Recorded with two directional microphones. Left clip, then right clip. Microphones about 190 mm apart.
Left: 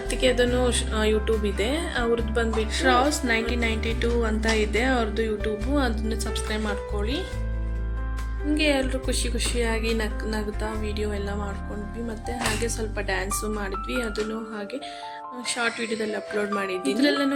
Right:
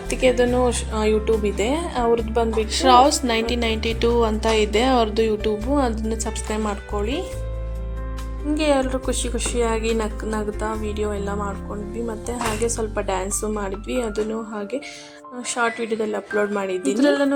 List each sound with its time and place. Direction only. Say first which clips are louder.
0.1 s a woman's voice: right 4 dB; 10° right (ahead or behind)
8.5 s a woman's voice: right 4 dB; 5° right (ahead or behind)
12.6 s a woman's voice: right 5 dB; 10° right (ahead or behind)
15.4 s a woman's voice: right 4 dB; 10° right (ahead or behind)